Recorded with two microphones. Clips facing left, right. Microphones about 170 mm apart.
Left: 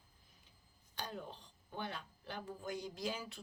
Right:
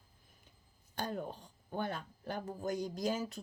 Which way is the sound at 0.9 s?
50° right (ahead or behind).